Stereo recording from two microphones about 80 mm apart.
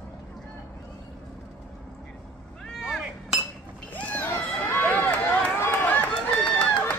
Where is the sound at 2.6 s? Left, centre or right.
Centre.